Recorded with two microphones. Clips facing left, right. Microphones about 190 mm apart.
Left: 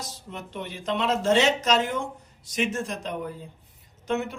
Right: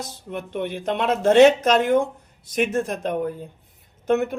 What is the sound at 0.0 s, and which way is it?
Speech, 55° right (ahead or behind).